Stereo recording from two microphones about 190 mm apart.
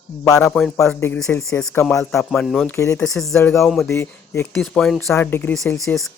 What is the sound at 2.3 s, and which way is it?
Speech, centre (ahead or behind).